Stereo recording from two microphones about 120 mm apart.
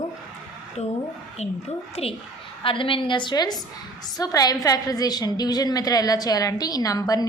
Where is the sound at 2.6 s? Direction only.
45° left (ahead or behind); by 7.2 s 30° left (ahead or behind).